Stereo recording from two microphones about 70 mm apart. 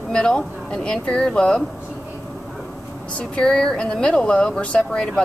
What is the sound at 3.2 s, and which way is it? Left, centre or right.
Speech, centre.